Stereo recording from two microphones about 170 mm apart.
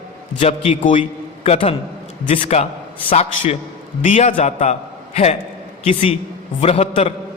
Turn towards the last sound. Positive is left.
turn(degrees=40)  # may be behind; listen again after turning